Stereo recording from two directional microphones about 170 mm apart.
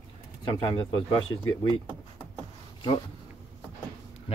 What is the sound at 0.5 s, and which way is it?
Speech, 30° left (ahead or behind).